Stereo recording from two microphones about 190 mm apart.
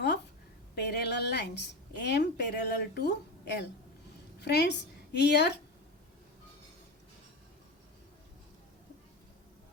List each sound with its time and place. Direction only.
0.8 s a woman's voice: 60° left (ahead or behind)